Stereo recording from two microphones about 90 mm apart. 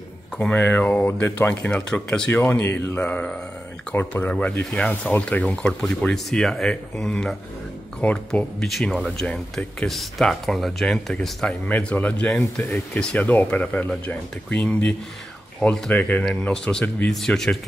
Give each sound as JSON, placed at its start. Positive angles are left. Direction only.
{"t": 0.4, "sound": "speech", "side_deg": 20}
{"t": 1.7, "sound": "speech", "side_deg": 10}
{"t": 9.2, "sound": "speech", "side_deg": 10}
{"t": 11.6, "sound": "speech", "side_deg": 15}